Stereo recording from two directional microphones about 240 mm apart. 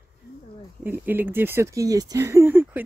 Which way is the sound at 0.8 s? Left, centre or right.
Centre.